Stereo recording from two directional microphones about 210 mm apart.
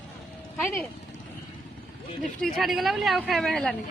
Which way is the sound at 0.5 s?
10° left (ahead or behind).